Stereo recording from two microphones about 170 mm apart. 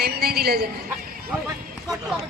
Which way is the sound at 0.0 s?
70° right (ahead or behind).